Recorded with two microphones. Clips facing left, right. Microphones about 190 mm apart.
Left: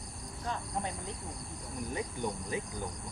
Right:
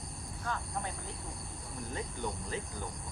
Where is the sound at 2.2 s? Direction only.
15° left (ahead or behind).